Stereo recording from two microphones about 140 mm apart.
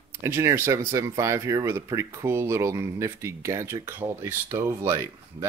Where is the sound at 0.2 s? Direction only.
20° right (ahead or behind).